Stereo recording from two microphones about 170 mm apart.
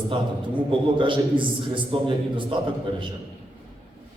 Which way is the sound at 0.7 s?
30° right (ahead or behind).